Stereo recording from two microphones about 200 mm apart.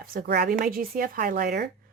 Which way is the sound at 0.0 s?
45° right (ahead or behind).